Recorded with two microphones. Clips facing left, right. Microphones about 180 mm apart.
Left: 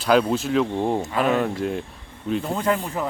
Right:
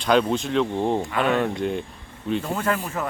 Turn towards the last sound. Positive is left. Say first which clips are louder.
# left 2 dB
turn(degrees=15)  # may be behind; listen again after turning